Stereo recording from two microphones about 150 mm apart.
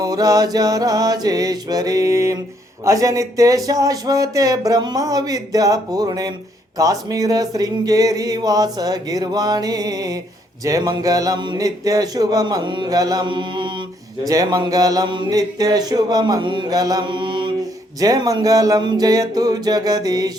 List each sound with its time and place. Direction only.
0.0 s speech: 25° right (ahead or behind)